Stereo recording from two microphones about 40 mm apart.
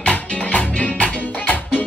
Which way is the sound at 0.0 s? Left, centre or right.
Left.